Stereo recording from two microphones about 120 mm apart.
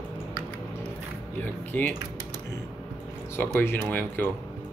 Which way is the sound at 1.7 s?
15° left (ahead or behind).